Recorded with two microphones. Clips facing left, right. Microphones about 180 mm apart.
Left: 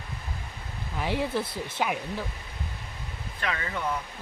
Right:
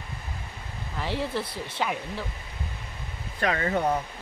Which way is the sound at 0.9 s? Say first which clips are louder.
Left 1 dB; 10° left (ahead or behind).